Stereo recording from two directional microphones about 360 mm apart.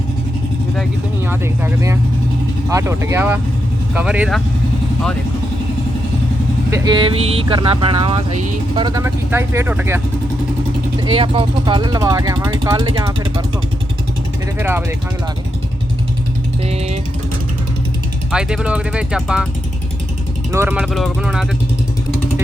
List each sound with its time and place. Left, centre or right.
0.8 s speech: centre
6.7 s speech: centre
11.0 s speech: centre
14.6 s speech: centre
16.6 s speech: centre
18.3 s speech: centre
20.5 s speech: centre